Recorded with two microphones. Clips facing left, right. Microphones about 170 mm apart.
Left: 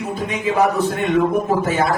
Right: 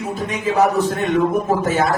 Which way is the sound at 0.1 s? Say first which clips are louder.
Even; 45° right (ahead or behind).